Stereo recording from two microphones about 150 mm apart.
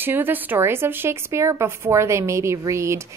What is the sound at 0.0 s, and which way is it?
A woman's voice, 15° right (ahead or behind).